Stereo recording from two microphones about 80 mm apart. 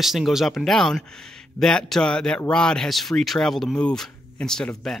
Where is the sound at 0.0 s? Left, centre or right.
Centre.